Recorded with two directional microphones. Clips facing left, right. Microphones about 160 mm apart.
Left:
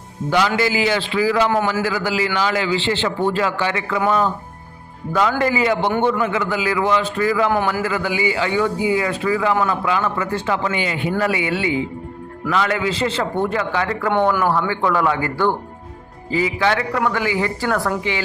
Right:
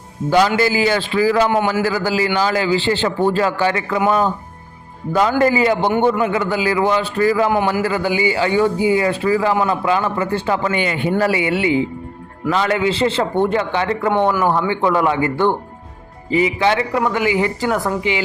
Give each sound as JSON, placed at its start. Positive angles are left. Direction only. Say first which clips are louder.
{"t": 0.3, "sound": "a man's voice", "louder": "right 3 dB", "side_deg": -40}
{"t": 5.4, "sound": "a man's voice", "louder": "right 3 dB", "side_deg": -30}
{"t": 10.7, "sound": "a man's voice", "louder": "right 3 dB", "side_deg": -55}
{"t": 11.2, "sound": "a man's voice", "louder": "right 3 dB", "side_deg": -30}
{"t": 14.1, "sound": "a man's voice", "louder": "right 1 dB", "side_deg": -10}
{"t": 14.7, "sound": "a man's voice", "louder": "right 2 dB", "side_deg": -20}